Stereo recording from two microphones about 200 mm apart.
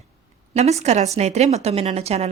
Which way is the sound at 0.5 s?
35° right (ahead or behind).